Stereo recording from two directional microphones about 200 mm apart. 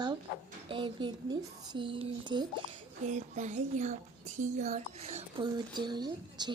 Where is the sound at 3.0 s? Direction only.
35° right (ahead or behind).